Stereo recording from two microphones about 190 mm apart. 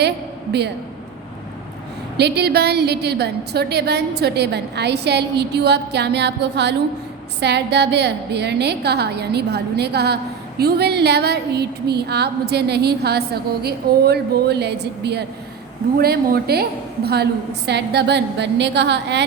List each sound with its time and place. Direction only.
2.1 s a woman's voice: 60° right (ahead or behind)